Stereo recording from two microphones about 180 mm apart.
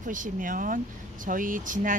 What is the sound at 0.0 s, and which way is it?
Speech, 45° right (ahead or behind).